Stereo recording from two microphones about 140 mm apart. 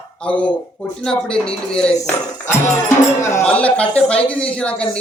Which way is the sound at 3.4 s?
10° left (ahead or behind).